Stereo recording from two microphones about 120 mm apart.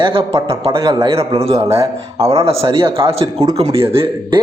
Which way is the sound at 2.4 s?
55° right (ahead or behind).